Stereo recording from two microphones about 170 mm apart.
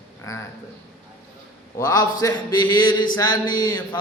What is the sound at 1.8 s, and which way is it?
A man's voice, 20° left (ahead or behind).